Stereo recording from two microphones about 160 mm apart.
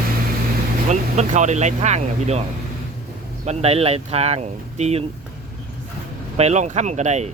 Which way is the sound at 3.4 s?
40° right (ahead or behind).